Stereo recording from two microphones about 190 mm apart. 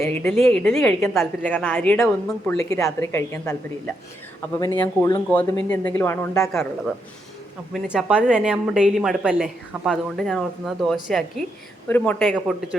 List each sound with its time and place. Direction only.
0.0 s a woman's voice: 5° left (ahead or behind)
5.0 s a woman's voice: 10° left (ahead or behind)
6.5 s a woman's voice: centre (ahead or behind)
12.2 s a woman's voice: centre (ahead or behind)